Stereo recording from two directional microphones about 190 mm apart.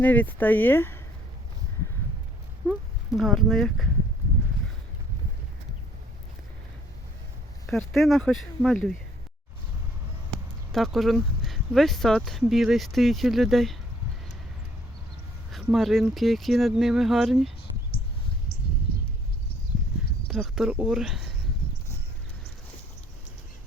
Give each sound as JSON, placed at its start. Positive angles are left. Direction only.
{"t": 0.0, "sound": "speech", "side_deg": 10}
{"t": 2.6, "sound": "speech", "side_deg": 0}
{"t": 7.7, "sound": "speech", "side_deg": 0}
{"t": 10.7, "sound": "speech", "side_deg": 0}
{"t": 15.5, "sound": "speech", "side_deg": 0}
{"t": 18.9, "sound": "a sound", "side_deg": 55}
{"t": 20.2, "sound": "speech", "side_deg": 0}